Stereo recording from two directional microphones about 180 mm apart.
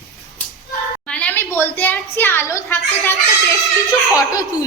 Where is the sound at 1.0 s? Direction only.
5° left (ahead or behind).